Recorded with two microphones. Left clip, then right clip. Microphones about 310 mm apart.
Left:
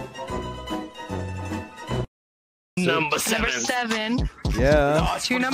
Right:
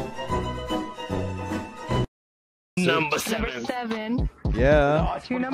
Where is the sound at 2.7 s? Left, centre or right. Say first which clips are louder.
Even; centre.